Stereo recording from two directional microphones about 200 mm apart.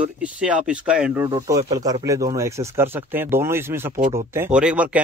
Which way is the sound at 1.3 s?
20° right (ahead or behind).